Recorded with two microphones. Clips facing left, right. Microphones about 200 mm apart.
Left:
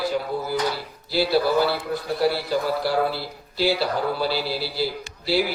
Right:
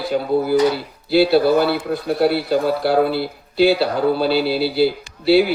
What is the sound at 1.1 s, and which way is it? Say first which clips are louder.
Speech: right 7 dB; 60° right (ahead or behind).